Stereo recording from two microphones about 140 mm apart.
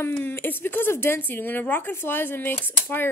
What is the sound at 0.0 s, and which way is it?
A woman's voice, 15° left (ahead or behind).